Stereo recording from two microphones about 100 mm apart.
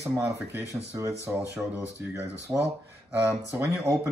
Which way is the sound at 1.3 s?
15° right (ahead or behind).